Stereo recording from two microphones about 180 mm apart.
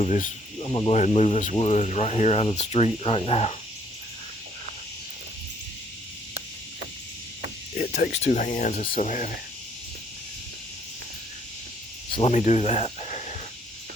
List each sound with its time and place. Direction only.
0.0 s speech: 45° left (ahead or behind)
0.7 s speech: 25° left (ahead or behind)
0.9 s speech: 40° left (ahead or behind)
7.8 s a sound: 50° left (ahead or behind)
8.1 s speech: 40° left (ahead or behind)
12.1 s speech: 35° left (ahead or behind)